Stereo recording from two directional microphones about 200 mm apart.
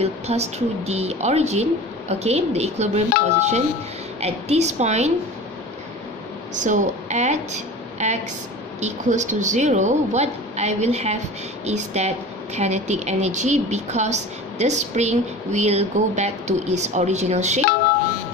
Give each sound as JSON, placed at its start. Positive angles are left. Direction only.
{"t": 0.0, "sound": "a woman's voice", "side_deg": -30}
{"t": 6.5, "sound": "a woman's voice", "side_deg": -40}